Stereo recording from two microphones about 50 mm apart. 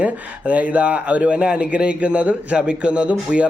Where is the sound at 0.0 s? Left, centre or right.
Right.